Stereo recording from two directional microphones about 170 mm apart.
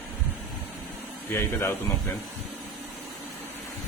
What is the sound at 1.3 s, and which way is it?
Speech, 15° left (ahead or behind).